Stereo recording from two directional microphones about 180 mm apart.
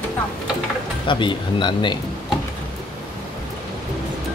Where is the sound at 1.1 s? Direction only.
25° left (ahead or behind).